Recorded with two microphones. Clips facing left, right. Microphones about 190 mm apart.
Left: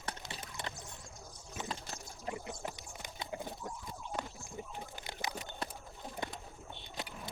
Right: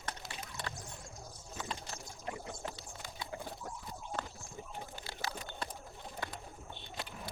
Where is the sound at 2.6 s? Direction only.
20° left (ahead or behind).